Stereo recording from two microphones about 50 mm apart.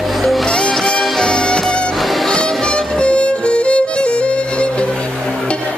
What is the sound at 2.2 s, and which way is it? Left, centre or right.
Music, centre.